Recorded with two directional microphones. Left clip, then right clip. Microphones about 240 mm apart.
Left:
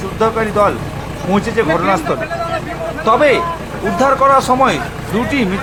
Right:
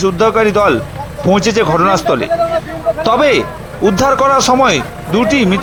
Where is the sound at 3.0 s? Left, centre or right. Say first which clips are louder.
Left 1 dB; right.